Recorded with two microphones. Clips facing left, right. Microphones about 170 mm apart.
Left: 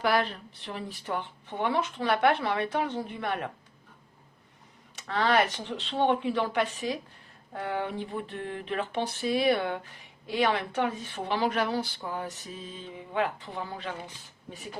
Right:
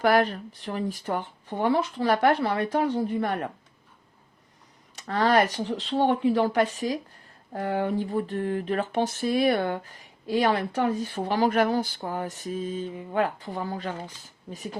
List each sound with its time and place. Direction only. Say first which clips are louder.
0.0 s speech: right 5 dB; 45° right (ahead or behind)
4.9 s speech: right 3 dB; 40° right (ahead or behind)